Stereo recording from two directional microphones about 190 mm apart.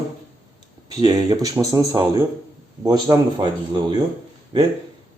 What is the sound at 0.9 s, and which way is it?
Speech, 20° right (ahead or behind).